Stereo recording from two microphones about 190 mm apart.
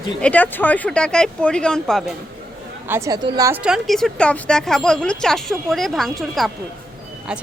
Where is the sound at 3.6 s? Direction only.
Centre (ahead or behind).